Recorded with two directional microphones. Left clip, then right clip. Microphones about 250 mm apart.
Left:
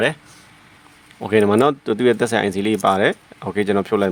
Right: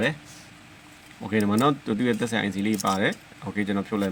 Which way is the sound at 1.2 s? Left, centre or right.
Left.